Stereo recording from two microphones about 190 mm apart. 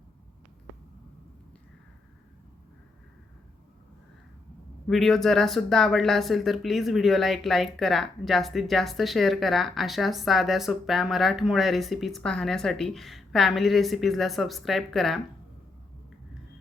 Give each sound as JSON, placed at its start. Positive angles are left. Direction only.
{"t": 4.9, "sound": "speech", "side_deg": 0}